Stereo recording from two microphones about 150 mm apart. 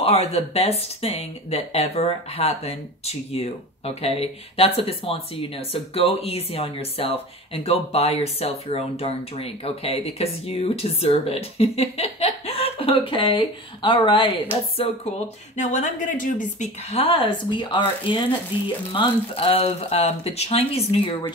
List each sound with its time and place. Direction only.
0.0 s speech: 40° left (ahead or behind)
14.8 s speech: 50° left (ahead or behind)